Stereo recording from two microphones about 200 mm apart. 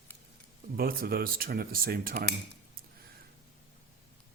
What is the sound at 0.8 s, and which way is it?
Speech, 45° right (ahead or behind).